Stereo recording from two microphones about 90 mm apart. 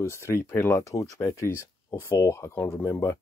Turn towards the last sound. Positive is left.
turn(degrees=30)  # may be behind; listen again after turning